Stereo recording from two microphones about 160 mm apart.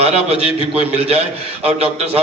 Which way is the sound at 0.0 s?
40° right (ahead or behind).